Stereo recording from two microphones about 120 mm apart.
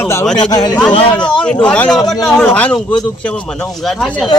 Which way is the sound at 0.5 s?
35° left (ahead or behind).